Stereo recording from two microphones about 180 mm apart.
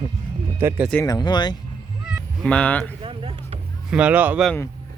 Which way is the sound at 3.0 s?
30° right (ahead or behind).